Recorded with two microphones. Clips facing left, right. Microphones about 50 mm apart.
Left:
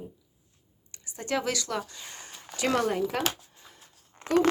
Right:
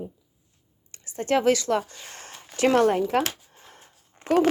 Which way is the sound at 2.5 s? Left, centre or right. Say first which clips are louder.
Right 7 dB; right.